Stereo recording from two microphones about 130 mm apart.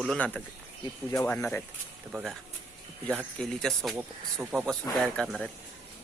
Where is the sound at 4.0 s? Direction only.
15° right (ahead or behind).